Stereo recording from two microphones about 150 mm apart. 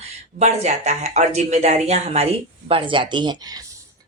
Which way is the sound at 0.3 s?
50° right (ahead or behind).